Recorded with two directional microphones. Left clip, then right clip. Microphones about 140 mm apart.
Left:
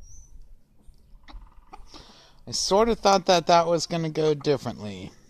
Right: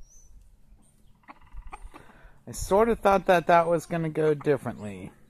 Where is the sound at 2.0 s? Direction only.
20° left (ahead or behind).